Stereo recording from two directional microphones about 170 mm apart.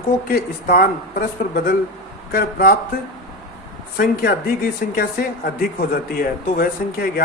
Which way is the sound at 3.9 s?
65° left (ahead or behind).